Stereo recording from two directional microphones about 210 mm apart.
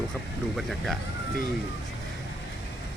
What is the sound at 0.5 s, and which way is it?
Speech, centre (ahead or behind).